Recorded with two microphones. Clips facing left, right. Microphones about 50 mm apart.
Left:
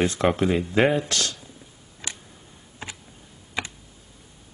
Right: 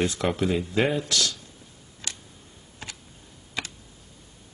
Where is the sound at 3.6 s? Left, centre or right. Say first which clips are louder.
Left 3 dB; centre.